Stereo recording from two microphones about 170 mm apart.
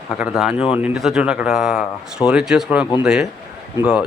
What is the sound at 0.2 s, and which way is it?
Speech, 5° right (ahead or behind).